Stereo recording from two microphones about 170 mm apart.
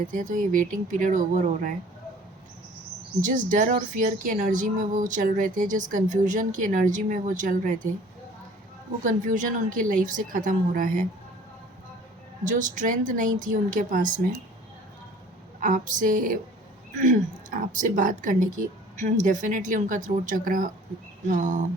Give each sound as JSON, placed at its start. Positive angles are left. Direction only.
{"t": 0.0, "sound": "speech", "side_deg": -50}
{"t": 3.2, "sound": "speech", "side_deg": -50}
{"t": 9.0, "sound": "speech", "side_deg": -50}
{"t": 12.5, "sound": "speech", "side_deg": -50}
{"t": 15.6, "sound": "speech", "side_deg": -50}